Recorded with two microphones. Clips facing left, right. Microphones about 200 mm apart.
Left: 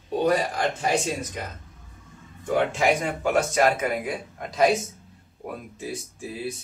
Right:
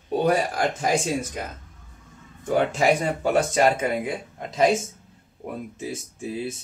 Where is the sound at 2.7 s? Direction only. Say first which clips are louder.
Right 2 dB; 30° right (ahead or behind).